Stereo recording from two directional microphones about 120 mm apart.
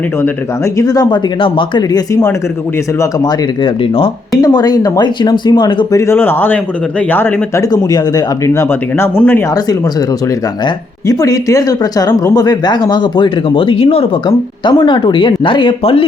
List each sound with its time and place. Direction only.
0.2 s speech: 25° left (ahead or behind)
1.4 s speech: 45° left (ahead or behind)
3.0 s speech: 35° left (ahead or behind)
5.9 s speech: 25° left (ahead or behind)
7.6 s speech: 30° left (ahead or behind)
8.6 s speech: 20° left (ahead or behind)
11.0 s speech: 30° left (ahead or behind); by 14.1 s 50° left (ahead or behind)
14.3 s speech: 40° left (ahead or behind)